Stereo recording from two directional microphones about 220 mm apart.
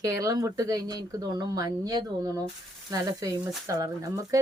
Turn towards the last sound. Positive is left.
turn(degrees=-15)  # may be behind; listen again after turning